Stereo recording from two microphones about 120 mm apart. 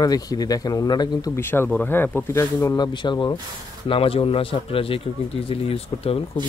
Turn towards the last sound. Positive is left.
turn(degrees=55)  # may be behind; listen again after turning